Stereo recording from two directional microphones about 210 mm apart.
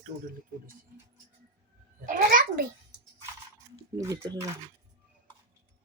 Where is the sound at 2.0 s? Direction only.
40° right (ahead or behind).